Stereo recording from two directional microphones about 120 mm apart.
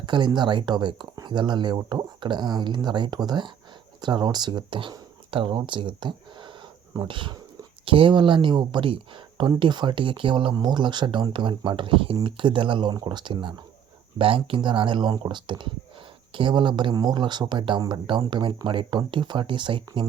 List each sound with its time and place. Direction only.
0.0 s speech: 40° right (ahead or behind)